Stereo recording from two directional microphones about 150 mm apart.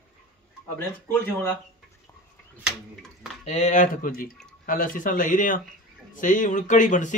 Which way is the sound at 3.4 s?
50° left (ahead or behind).